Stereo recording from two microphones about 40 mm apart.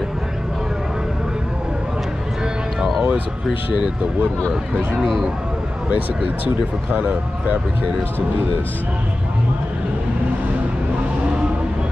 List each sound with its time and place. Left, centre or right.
3.7 s speech: right
6.9 s speech: right